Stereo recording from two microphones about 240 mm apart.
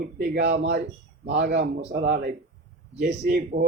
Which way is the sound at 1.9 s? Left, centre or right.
Right.